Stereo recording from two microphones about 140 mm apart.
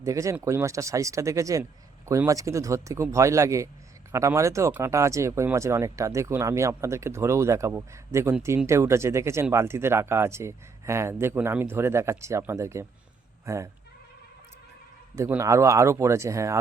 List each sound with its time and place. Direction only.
0.0 s speech: 20° right (ahead or behind)
15.3 s speech: 20° right (ahead or behind)